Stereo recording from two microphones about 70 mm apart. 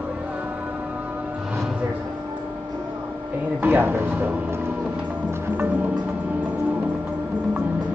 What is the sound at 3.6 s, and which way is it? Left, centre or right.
Speech, right.